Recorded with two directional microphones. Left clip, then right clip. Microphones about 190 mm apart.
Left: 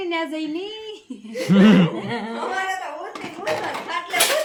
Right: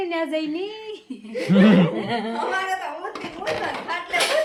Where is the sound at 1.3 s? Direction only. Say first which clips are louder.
Left 1 dB; 15° left (ahead or behind).